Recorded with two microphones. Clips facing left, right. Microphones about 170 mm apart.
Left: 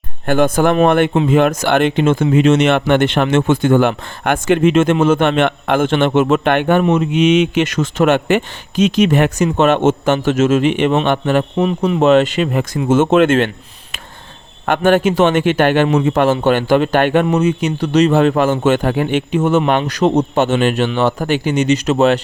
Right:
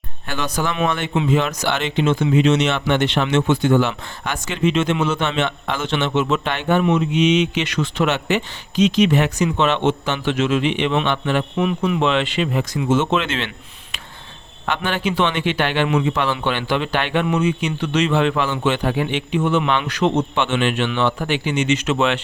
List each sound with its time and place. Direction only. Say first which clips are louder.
0.3 s speech: left 11 dB; 50° left (ahead or behind)
14.7 s speech: left 9 dB; 50° left (ahead or behind)